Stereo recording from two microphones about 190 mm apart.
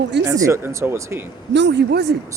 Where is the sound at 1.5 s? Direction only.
65° right (ahead or behind).